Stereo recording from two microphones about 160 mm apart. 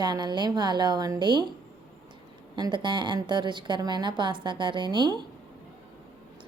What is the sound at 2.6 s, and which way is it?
Speech, 30° right (ahead or behind).